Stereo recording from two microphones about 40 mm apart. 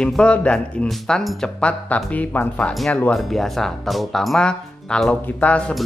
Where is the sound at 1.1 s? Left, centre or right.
Centre.